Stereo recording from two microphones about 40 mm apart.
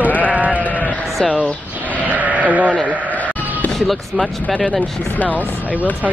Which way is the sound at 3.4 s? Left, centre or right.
Right.